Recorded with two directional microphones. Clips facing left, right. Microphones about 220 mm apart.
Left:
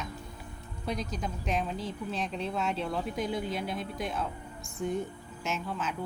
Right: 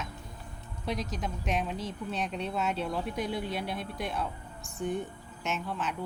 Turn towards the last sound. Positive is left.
turn(degrees=0)  # may be behind; listen again after turning